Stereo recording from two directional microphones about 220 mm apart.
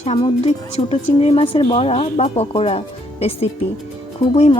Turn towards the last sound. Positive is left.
turn(degrees=25)  # may be behind; listen again after turning